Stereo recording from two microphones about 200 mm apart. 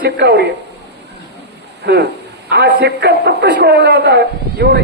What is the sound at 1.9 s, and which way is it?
A man's voice, 55° right (ahead or behind).